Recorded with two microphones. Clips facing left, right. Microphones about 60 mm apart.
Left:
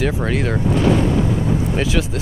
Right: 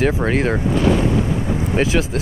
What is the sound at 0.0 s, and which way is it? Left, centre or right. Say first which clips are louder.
Speech: right 2 dB; right.